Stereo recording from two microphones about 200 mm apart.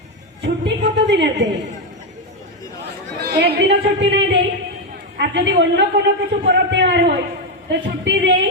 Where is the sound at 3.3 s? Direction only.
60° right (ahead or behind).